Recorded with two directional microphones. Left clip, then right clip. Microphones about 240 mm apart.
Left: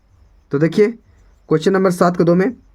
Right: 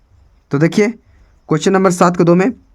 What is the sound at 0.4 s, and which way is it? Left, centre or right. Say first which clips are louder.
Speech: even; right.